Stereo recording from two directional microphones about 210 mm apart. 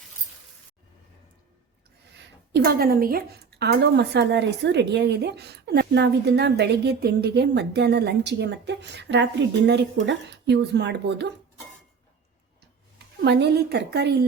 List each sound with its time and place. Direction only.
2.6 s a woman's voice: 45° right (ahead or behind)
13.2 s a woman's voice: 55° right (ahead or behind)